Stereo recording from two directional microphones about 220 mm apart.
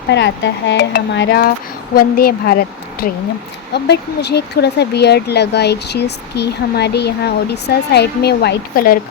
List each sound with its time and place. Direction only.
0.1 s speech: 55° left (ahead or behind)
3.7 s speech: 50° left (ahead or behind)